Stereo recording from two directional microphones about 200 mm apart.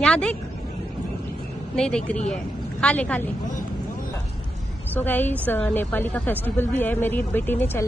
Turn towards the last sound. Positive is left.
turn(degrees=10)  # may be behind; listen again after turning